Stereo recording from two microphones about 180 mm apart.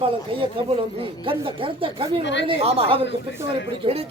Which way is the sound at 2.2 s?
80° left.